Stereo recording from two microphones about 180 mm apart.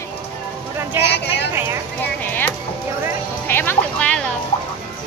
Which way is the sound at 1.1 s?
70° left (ahead or behind).